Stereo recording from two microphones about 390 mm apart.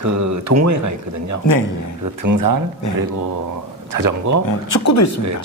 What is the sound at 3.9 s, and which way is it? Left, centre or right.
Speech, right.